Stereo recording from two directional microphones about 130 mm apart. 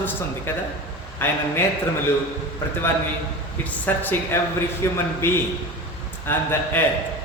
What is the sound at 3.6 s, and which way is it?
A man's voice, 15° left (ahead or behind).